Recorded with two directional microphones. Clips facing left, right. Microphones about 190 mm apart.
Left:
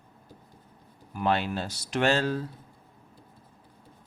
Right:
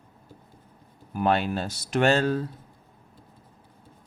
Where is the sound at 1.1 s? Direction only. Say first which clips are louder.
Right 3 dB; 50° right (ahead or behind).